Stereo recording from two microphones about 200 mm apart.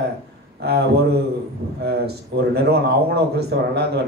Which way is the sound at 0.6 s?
55° right (ahead or behind).